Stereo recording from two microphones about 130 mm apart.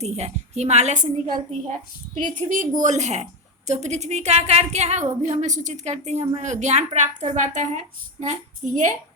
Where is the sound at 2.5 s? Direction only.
80° right.